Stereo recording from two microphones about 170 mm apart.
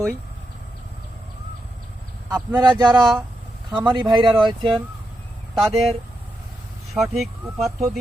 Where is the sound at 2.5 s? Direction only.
25° right (ahead or behind).